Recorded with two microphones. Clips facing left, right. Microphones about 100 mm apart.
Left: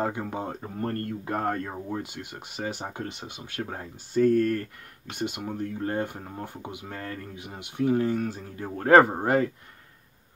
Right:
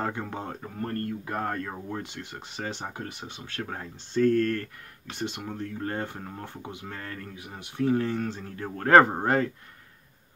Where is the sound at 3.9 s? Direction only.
10° left (ahead or behind).